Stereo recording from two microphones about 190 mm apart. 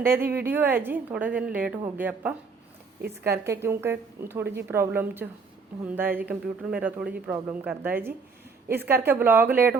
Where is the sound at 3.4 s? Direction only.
15° right (ahead or behind).